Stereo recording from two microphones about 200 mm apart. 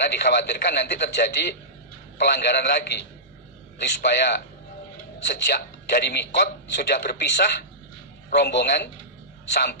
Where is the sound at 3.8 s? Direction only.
60° left (ahead or behind).